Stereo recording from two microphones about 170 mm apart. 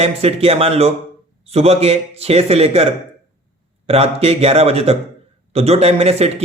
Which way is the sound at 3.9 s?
35° right (ahead or behind).